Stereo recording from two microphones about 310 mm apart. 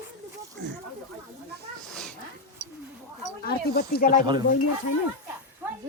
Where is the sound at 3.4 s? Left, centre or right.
Left.